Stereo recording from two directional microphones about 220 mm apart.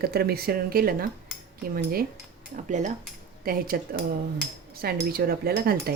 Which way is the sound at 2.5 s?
35° right (ahead or behind).